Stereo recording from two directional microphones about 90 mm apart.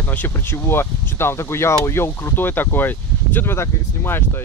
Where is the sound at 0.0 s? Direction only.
20° left (ahead or behind).